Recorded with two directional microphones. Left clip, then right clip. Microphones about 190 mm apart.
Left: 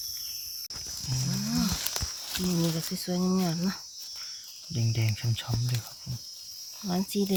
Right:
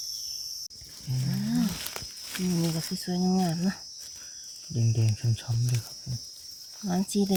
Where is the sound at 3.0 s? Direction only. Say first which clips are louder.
Right 1 dB; 45° right (ahead or behind).